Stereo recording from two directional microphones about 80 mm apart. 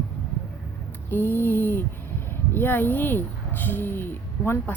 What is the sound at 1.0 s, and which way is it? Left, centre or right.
Speech, left.